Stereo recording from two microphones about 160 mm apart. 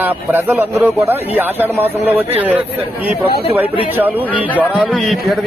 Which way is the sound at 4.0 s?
10° right (ahead or behind).